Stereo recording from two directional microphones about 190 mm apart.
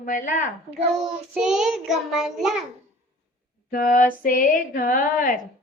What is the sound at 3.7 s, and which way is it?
Speech, 45° left (ahead or behind).